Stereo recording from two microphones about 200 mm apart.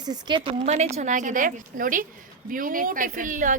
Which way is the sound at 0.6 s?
35° right (ahead or behind).